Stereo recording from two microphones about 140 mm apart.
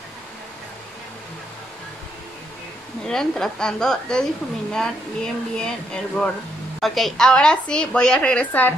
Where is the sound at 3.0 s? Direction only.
5° left (ahead or behind).